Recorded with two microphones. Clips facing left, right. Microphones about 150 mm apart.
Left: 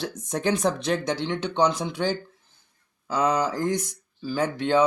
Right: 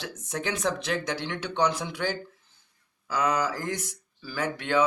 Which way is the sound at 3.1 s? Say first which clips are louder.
Left 3 dB; 30° left (ahead or behind).